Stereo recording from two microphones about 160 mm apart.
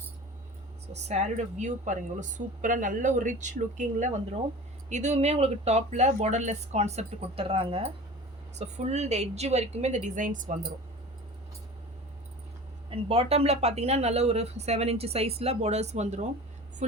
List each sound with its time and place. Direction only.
1.0 s a woman's voice: 45° right (ahead or behind)
12.9 s speech: 35° right (ahead or behind)